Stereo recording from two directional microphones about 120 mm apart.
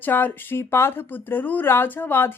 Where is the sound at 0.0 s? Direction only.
15° left (ahead or behind).